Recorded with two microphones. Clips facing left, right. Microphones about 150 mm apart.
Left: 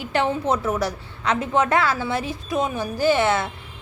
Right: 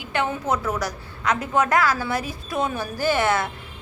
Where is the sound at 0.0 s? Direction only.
35° left (ahead or behind).